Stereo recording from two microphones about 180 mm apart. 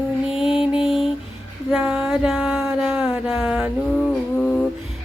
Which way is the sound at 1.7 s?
10° right (ahead or behind).